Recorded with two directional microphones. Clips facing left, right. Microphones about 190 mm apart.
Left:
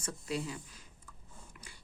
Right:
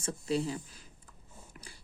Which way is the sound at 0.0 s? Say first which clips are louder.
Right 6 dB; 30° right (ahead or behind).